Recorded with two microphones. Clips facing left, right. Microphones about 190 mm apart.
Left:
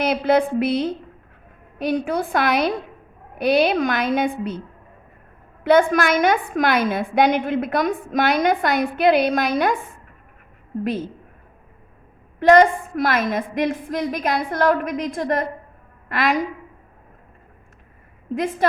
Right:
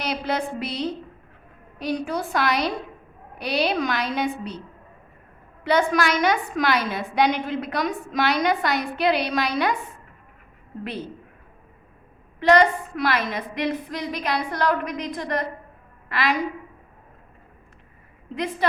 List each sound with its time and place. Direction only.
0.0 s a woman's voice: 55° left (ahead or behind)
5.6 s a woman's voice: 50° left (ahead or behind)
12.4 s a woman's voice: 45° left (ahead or behind)